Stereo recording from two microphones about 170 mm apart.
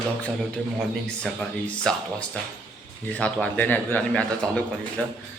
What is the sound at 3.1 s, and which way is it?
A man's voice, 10° left (ahead or behind).